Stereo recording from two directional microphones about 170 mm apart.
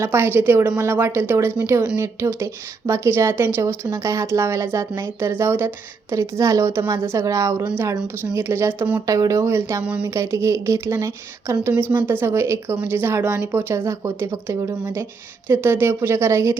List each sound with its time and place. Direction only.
0.0 s a woman's voice: 15° right (ahead or behind)